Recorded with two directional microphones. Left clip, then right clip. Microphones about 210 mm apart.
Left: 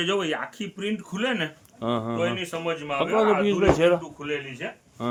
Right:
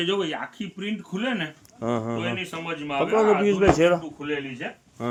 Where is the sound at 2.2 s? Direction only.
40° left (ahead or behind).